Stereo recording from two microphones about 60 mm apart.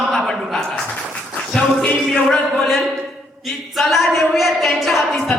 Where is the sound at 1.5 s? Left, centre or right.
Centre.